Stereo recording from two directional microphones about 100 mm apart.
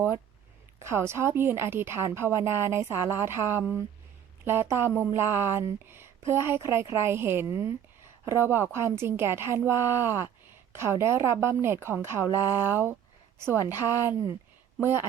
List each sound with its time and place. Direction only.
0.8 s a woman's voice: 25° right (ahead or behind)